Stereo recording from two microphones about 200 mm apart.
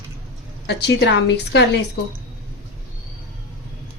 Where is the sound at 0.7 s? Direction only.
60° left (ahead or behind).